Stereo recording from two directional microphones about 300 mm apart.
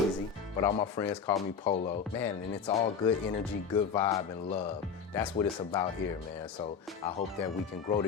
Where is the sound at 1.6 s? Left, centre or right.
Centre.